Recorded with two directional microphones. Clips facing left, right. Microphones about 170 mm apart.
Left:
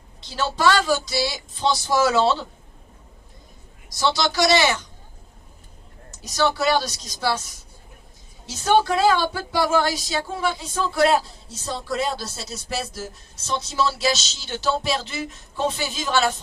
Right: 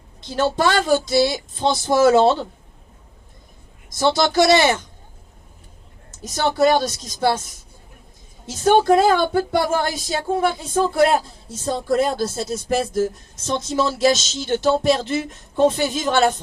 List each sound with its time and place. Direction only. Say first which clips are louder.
0.2 s speech: right 4 dB; 50° right (ahead or behind)
3.8 s speech: right 4 dB; 50° right (ahead or behind)
6.1 s a sound: even; 50° right (ahead or behind)
6.6 s speech: right 5 dB; 50° right (ahead or behind)
8.4 s speech: right 5 dB; 50° right (ahead or behind)